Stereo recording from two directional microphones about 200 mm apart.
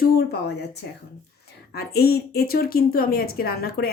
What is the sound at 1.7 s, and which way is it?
A woman's voice, 50° left (ahead or behind).